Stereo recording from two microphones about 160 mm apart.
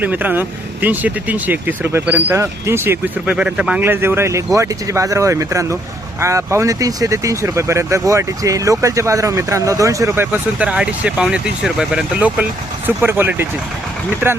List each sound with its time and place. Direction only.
0.0 s speech: 10° right (ahead or behind)